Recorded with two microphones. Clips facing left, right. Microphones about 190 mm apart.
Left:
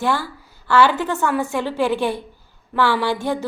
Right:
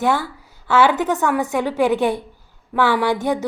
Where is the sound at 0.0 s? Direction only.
20° right (ahead or behind).